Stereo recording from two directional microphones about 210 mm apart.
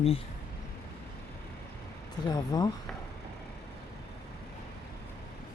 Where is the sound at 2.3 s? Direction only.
20° left (ahead or behind).